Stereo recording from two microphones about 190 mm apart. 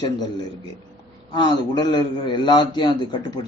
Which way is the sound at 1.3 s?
25° left (ahead or behind).